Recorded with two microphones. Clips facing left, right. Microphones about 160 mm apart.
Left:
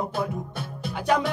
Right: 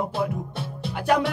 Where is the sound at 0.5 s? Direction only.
30° right (ahead or behind).